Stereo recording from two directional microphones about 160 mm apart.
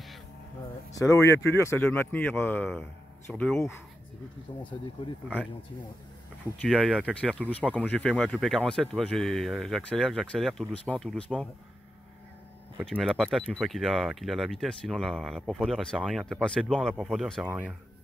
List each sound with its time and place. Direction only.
0.9 s speech: 20° left (ahead or behind)
6.7 s speech: centre (ahead or behind)
12.9 s speech: 5° right (ahead or behind)